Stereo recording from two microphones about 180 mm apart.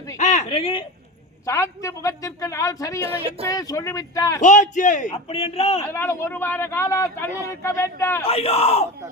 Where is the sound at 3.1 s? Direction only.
35° right (ahead or behind).